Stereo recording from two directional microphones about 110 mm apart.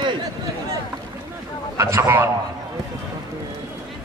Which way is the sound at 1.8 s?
25° right (ahead or behind).